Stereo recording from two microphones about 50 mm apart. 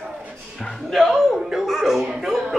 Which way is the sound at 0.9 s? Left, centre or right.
Centre.